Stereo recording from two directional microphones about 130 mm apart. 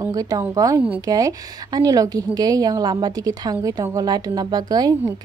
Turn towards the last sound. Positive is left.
turn(degrees=-30)  # may be behind; listen again after turning